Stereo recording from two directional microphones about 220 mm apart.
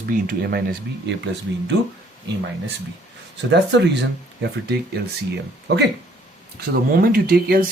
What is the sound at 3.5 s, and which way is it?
Speech, 50° right (ahead or behind).